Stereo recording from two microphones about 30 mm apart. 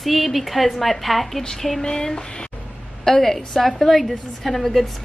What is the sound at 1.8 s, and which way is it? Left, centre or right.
Speech, left.